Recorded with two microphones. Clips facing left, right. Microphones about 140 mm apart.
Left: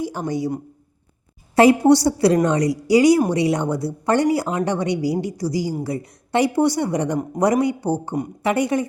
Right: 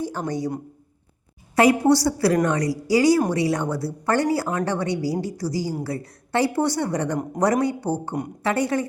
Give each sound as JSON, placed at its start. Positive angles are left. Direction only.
{"t": 0.0, "sound": "speech", "side_deg": 10}
{"t": 1.5, "sound": "a woman's voice", "side_deg": 25}